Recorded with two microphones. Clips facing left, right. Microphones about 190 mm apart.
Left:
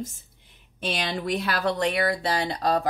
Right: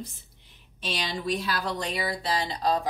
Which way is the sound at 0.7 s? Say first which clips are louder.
Left 4 dB; 55° left (ahead or behind).